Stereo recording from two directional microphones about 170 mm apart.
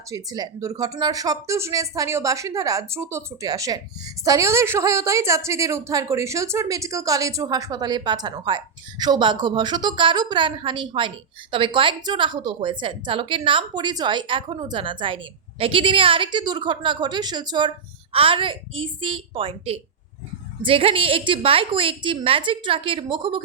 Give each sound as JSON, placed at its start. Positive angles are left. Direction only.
{"t": 0.1, "sound": "a woman's voice", "side_deg": -20}